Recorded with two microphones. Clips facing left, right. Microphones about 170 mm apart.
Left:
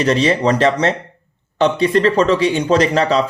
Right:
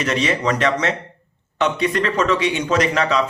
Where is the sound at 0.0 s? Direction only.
30° left (ahead or behind).